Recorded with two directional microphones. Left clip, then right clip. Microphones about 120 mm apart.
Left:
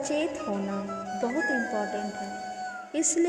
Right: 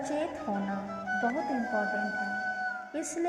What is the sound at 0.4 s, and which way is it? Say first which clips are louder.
Speech: left 2 dB; 35° left (ahead or behind).